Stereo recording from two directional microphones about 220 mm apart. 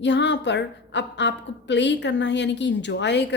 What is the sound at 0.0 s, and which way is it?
A woman's voice, 50° left (ahead or behind).